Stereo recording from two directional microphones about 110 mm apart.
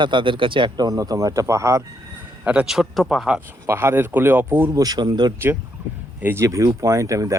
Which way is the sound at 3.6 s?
25° right (ahead or behind).